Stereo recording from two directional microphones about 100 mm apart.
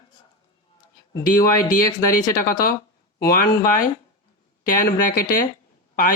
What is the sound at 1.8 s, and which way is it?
Speech, 40° left (ahead or behind).